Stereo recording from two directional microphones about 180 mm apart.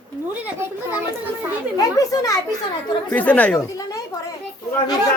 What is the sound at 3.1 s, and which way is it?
Speech, 10° left (ahead or behind).